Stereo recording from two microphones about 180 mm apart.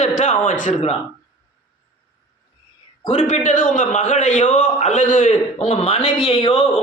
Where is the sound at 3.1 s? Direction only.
40° left (ahead or behind).